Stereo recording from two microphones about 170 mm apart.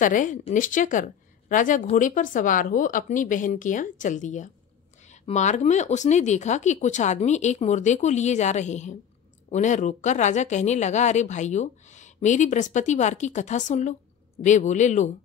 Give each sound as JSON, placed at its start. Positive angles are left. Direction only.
{"t": 0.0, "sound": "speech", "side_deg": 50}